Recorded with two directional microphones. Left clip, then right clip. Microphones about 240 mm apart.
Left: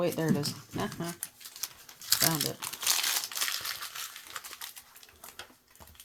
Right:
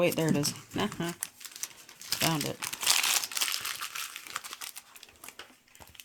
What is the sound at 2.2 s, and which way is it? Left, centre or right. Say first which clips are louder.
Crumpling: even; right.